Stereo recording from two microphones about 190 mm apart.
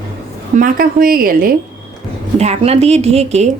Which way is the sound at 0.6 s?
50° right (ahead or behind).